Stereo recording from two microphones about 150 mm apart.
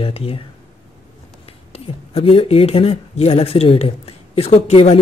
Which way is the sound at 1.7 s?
40° left (ahead or behind).